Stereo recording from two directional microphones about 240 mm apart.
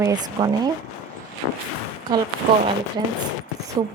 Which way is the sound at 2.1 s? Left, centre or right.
Centre.